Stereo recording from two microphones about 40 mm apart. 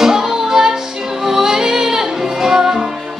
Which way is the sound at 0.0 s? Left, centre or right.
Centre.